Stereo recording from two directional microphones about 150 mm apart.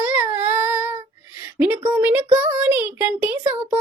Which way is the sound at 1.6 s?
15° right (ahead or behind).